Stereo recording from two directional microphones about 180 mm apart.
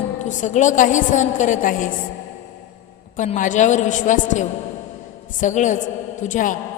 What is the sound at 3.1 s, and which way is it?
A man's voice, 45° left (ahead or behind).